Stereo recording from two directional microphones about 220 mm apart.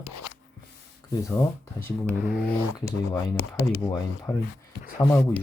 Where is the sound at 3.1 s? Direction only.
15° left (ahead or behind).